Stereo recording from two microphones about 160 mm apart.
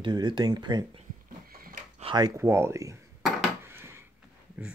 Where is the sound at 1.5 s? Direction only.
65° right (ahead or behind).